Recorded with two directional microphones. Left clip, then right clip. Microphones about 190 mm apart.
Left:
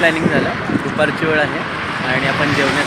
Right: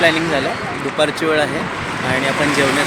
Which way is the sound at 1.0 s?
15° right (ahead or behind).